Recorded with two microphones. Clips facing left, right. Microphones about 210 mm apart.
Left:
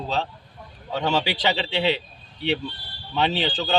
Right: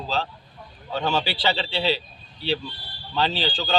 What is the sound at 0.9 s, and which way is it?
Speech, 15° left (ahead or behind).